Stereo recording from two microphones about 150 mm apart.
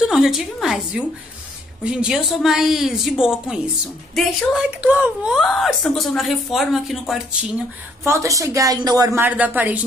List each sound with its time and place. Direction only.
0.0 s speech: 5° right (ahead or behind)
8.0 s speech: 20° right (ahead or behind)